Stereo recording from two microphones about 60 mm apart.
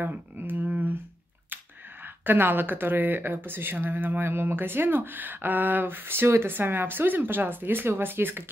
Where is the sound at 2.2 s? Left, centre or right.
Right.